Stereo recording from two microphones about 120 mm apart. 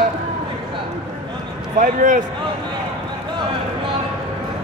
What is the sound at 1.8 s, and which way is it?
Speech, 90° right.